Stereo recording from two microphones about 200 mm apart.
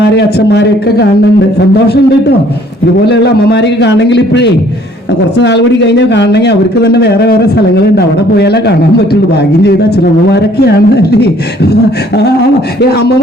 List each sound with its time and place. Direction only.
0.0 s speech: 60° left (ahead or behind)
3.1 s speech: 60° left (ahead or behind)
10.3 s speech: 55° left (ahead or behind)